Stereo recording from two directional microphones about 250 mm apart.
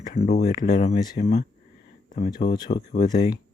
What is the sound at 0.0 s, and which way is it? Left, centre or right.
Speech, left.